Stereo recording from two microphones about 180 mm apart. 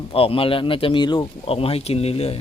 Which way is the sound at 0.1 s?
30° left (ahead or behind).